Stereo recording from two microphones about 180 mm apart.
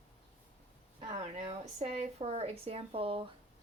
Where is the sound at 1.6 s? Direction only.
40° right (ahead or behind).